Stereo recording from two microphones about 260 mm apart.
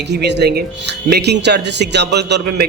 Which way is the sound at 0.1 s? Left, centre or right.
Right.